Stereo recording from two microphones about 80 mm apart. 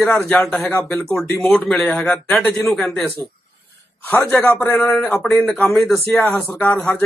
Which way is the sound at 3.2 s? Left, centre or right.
Left.